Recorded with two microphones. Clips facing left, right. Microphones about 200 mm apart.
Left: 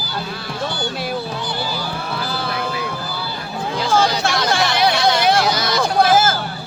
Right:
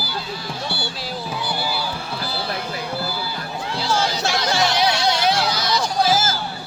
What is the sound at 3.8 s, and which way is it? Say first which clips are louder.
Music: left 5 dB; 55° left (ahead or behind).